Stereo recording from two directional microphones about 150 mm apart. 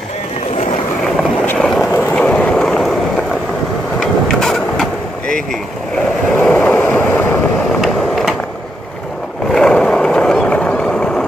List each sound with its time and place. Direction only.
1.4 s vehicle: 10° left (ahead or behind)
4.0 s printer: 5° left (ahead or behind)
6.3 s vehicle: 10° left (ahead or behind)
7.8 s a sound: centre (ahead or behind)
9.5 s vehicle: 5° left (ahead or behind)